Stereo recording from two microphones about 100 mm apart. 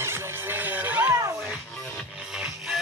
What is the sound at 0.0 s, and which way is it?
Music, 25° right (ahead or behind).